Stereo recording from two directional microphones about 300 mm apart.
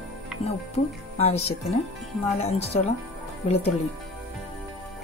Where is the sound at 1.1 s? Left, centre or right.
Left.